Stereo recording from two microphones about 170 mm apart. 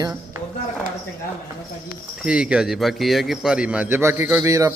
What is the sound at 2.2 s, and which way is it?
A man's voice, 5° right (ahead or behind).